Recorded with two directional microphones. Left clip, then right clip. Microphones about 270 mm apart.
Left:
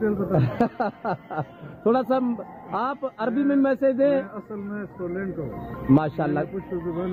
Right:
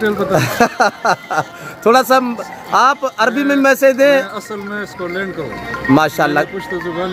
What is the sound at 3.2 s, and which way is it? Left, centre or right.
Speech, centre.